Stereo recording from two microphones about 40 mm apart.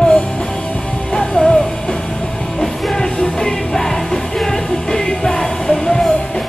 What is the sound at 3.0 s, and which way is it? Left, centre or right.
Music, centre.